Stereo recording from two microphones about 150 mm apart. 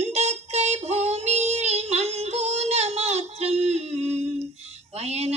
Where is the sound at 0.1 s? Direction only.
45° right (ahead or behind).